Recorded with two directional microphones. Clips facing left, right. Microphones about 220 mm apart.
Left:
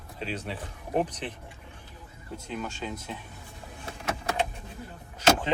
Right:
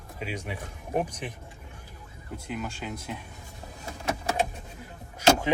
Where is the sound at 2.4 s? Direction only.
10° right (ahead or behind).